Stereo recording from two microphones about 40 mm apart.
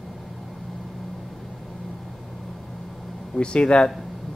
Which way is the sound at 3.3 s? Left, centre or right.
Left.